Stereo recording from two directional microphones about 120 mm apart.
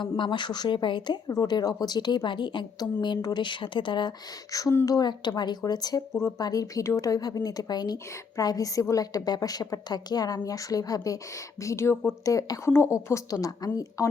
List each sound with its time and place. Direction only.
0.0 s speech: 40° left (ahead or behind)
4.5 s speech: 30° left (ahead or behind)